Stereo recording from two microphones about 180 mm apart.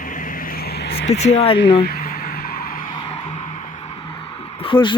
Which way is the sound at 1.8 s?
55° left (ahead or behind).